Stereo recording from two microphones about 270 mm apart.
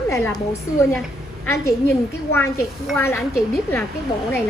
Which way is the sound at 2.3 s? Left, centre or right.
Centre.